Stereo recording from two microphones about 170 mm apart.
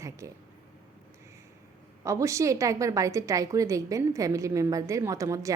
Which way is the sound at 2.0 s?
20° right (ahead or behind).